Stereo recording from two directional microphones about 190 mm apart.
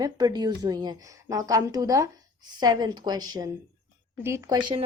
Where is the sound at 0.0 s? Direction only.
20° right (ahead or behind).